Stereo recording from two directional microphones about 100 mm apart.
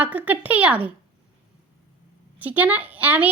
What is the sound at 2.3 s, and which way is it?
Speech, 15° right (ahead or behind).